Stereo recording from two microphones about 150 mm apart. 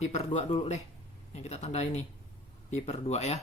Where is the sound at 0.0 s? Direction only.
50° left (ahead or behind).